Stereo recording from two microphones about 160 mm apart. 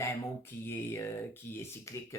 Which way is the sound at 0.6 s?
15° left (ahead or behind).